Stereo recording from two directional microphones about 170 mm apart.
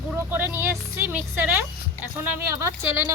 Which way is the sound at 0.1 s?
10° right (ahead or behind).